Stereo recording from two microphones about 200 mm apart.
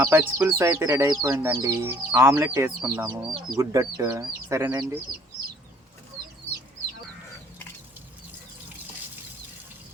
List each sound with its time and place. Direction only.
0.0 s speech: 10° right (ahead or behind)